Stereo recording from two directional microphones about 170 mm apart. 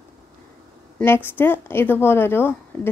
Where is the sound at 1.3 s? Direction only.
10° left (ahead or behind).